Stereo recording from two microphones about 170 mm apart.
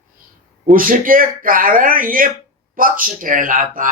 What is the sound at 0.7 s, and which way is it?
Speech, 55° right (ahead or behind).